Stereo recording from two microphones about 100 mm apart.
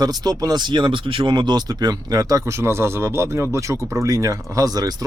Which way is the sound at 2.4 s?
25° right (ahead or behind).